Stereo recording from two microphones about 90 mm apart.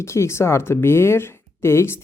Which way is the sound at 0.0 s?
30° left (ahead or behind).